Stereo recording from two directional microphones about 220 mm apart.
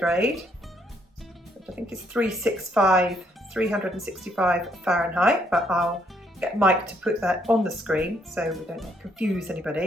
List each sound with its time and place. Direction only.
0.0 s speech: centre (ahead or behind)
1.7 s speech: 5° right (ahead or behind)